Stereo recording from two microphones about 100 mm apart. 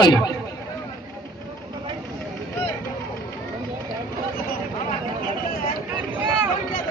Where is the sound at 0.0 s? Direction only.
45° left (ahead or behind).